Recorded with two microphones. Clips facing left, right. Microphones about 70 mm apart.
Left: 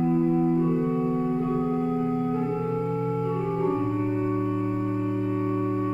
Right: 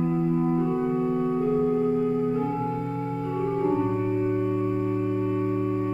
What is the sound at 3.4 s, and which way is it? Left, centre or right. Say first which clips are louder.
Organ: right 5 dB; centre.